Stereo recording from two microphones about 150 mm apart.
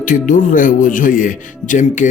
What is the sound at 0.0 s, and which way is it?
Speech, 60° left (ahead or behind).